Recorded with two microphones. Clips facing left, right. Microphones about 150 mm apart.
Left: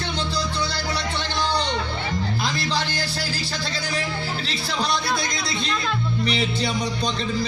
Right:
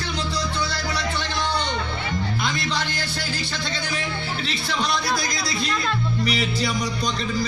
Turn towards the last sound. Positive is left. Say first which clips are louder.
# even
turn(degrees=30)  # may be behind; listen again after turning